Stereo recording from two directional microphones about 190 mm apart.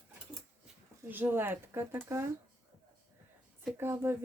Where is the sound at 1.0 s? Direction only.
10° right (ahead or behind).